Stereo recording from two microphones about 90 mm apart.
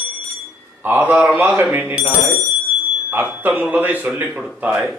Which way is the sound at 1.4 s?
25° right (ahead or behind).